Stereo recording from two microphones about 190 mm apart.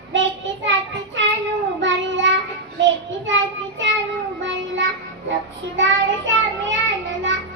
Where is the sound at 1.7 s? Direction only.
75° right (ahead or behind).